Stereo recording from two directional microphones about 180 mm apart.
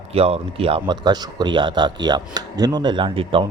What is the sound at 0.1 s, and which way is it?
Speech, 35° right (ahead or behind).